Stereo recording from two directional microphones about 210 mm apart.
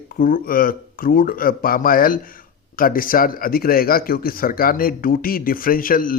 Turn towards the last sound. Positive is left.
turn(degrees=40)  # may be behind; listen again after turning